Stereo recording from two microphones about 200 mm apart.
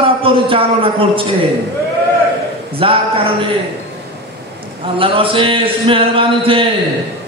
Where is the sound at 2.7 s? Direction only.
25° right (ahead or behind).